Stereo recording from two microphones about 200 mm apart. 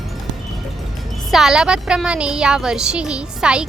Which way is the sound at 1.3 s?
Centre (ahead or behind).